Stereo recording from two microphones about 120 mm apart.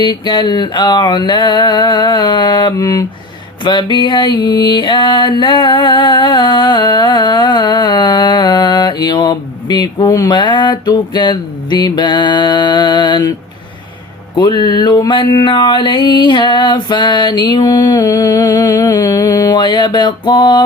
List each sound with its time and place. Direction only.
0.0 s music: 40° left (ahead or behind)
3.6 s music: 40° left (ahead or behind)
14.3 s music: 35° left (ahead or behind)